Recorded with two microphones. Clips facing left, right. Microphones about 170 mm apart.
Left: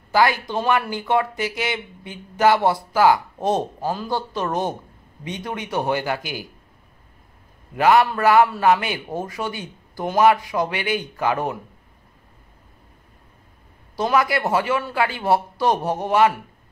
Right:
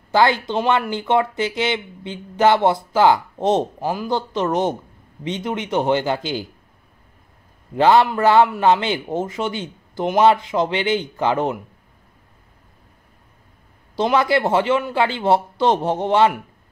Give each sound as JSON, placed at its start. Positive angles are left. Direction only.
{"t": 0.1, "sound": "speech", "side_deg": -25}
{"t": 7.7, "sound": "speech", "side_deg": -30}
{"t": 13.9, "sound": "speech", "side_deg": -25}